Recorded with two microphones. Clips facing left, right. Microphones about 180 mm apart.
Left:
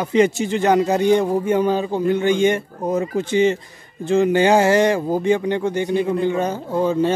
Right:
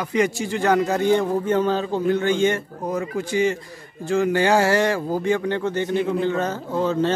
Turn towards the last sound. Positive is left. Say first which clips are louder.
# left 3 dB
turn(degrees=15)  # may be behind; listen again after turning